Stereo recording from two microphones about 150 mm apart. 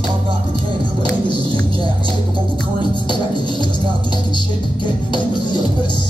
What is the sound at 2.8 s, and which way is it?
Music, 30° left (ahead or behind).